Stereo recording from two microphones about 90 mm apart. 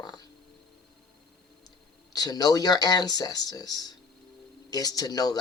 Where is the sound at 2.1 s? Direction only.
45° left (ahead or behind).